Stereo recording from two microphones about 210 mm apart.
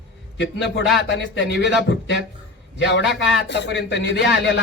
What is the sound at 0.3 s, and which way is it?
Speech, 55° left (ahead or behind).